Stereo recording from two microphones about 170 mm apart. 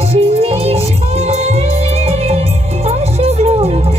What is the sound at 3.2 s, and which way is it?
Music, 35° right (ahead or behind).